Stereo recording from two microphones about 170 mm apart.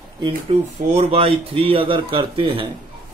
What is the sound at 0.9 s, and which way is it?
A man's voice, 35° right (ahead or behind).